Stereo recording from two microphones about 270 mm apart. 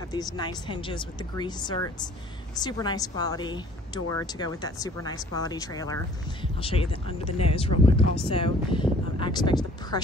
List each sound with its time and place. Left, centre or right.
0.1 s speech: centre